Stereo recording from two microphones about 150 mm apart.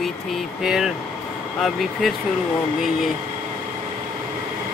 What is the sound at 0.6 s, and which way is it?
Speech, centre (ahead or behind).